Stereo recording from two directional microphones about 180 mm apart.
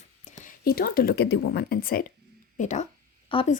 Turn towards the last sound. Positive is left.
turn(degrees=30)  # may be behind; listen again after turning